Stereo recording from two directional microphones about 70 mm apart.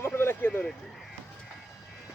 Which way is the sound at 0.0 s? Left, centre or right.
Left.